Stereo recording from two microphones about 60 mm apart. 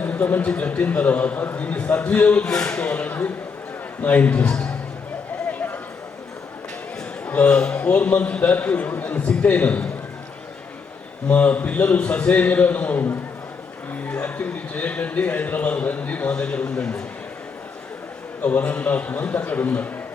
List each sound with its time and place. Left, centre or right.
0.0 s a man's voice: left
5.5 s a sound: left
7.3 s a man's voice: centre
11.3 s a man's voice: left
18.4 s a man's voice: left